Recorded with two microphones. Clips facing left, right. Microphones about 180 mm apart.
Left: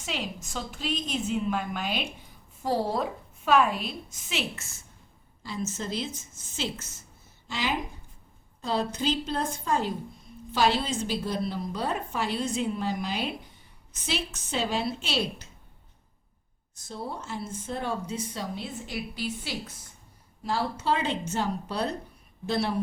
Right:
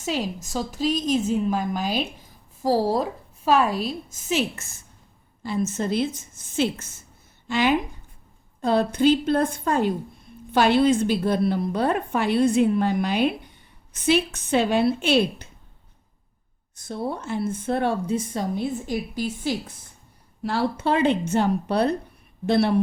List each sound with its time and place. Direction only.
0.0 s a woman's voice: 40° right (ahead or behind)
5.4 s speech: 55° right (ahead or behind)
7.4 s a woman's voice: 60° right (ahead or behind)
16.7 s speech: 60° right (ahead or behind); by 19.5 s 45° right (ahead or behind)
20.4 s speech: 65° right (ahead or behind)